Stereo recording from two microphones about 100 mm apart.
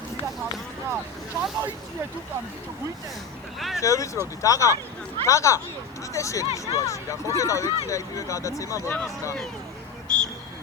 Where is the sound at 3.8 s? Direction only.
30° left (ahead or behind).